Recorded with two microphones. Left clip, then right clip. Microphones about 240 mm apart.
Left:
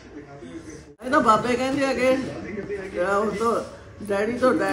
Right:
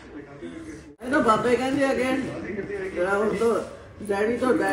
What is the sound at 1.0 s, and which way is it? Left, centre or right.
Speech, centre.